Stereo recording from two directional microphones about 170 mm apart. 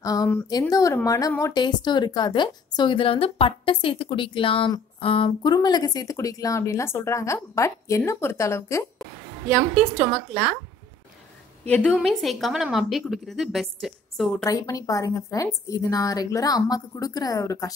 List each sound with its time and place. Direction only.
0.0 s a woman's voice: 20° left (ahead or behind)
9.6 s speech: centre (ahead or behind)
11.7 s speech: 5° left (ahead or behind)
14.4 s a woman's voice: 20° left (ahead or behind)